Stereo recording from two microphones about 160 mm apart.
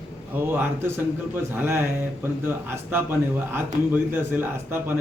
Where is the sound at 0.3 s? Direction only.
10° right (ahead or behind).